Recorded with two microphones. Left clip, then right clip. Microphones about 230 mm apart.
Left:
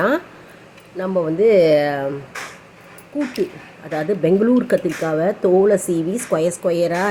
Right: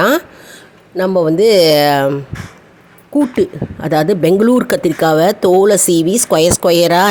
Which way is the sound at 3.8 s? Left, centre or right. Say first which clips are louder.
Right 7 dB; right.